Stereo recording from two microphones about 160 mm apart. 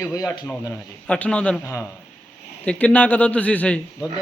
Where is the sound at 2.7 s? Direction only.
10° left (ahead or behind).